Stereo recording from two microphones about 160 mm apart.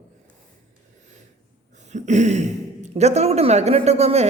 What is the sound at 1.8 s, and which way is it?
Speech, 45° right (ahead or behind).